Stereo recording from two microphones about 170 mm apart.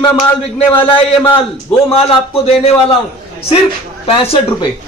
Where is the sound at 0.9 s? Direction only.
30° left (ahead or behind).